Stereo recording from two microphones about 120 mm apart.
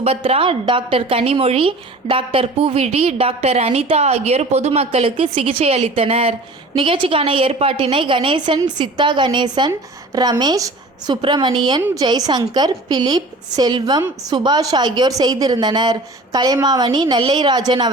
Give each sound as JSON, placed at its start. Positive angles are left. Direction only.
{"t": 0.0, "sound": "a woman's voice", "side_deg": -55}
{"t": 6.7, "sound": "a woman's voice", "side_deg": -45}